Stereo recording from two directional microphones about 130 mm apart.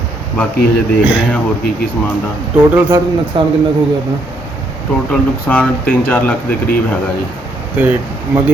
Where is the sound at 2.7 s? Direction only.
15° right (ahead or behind).